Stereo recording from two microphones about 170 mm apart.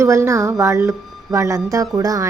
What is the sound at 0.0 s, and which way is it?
A woman's voice, 15° right (ahead or behind).